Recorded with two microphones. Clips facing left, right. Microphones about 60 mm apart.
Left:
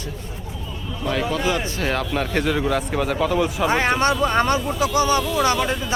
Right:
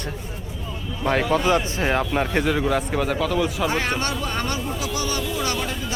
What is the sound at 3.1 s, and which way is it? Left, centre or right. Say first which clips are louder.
Speech: left 2 dB; centre.